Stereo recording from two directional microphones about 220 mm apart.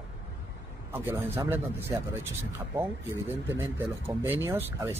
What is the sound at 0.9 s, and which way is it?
Speech, 10° right (ahead or behind).